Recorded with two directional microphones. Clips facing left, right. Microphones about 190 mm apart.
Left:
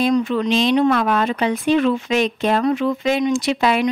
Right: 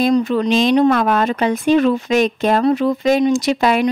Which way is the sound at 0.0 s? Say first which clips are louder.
Right 2 dB; 40° right (ahead or behind).